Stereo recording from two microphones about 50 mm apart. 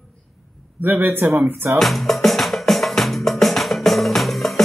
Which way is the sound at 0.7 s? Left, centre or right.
Right.